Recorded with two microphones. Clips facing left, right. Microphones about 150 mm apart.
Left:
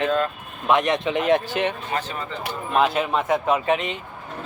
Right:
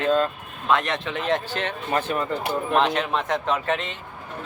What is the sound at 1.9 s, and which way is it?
Speech, 50° right (ahead or behind).